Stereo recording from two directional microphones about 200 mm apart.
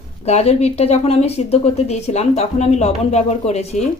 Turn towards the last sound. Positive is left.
turn(degrees=35)  # may be behind; listen again after turning